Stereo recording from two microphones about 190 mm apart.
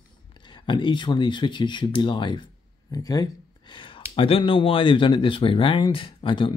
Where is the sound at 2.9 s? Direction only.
20° left (ahead or behind).